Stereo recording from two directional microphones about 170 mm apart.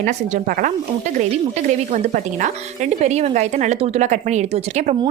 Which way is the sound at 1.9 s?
45° right (ahead or behind).